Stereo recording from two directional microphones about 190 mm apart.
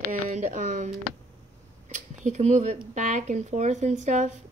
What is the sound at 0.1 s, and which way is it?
Speech, 40° right (ahead or behind).